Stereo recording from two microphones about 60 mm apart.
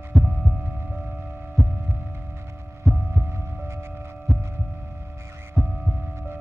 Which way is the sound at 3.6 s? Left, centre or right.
Right.